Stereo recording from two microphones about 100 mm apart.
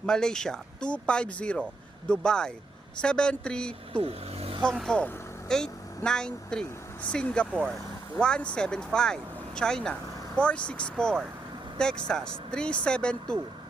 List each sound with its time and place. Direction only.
0.0 s speech: 5° left (ahead or behind)
3.9 s speech: 75° right (ahead or behind)
4.8 s speech: 5° left (ahead or behind)